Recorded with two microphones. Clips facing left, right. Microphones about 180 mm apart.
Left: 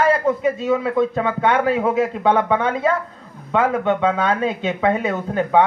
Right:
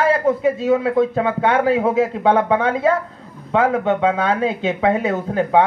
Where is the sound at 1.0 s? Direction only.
10° right (ahead or behind).